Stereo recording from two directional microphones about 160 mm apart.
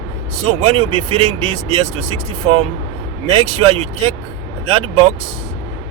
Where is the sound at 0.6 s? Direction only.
35° right (ahead or behind).